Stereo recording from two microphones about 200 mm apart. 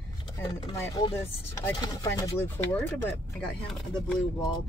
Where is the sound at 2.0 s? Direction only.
10° left (ahead or behind).